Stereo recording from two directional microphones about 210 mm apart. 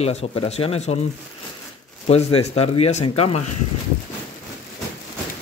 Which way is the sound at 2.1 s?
30° left (ahead or behind).